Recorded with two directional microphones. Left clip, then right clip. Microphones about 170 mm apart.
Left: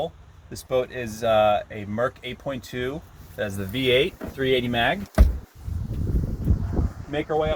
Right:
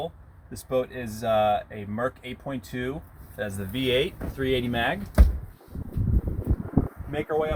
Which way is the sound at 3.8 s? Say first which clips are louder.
Left 4 dB; 40° left (ahead or behind).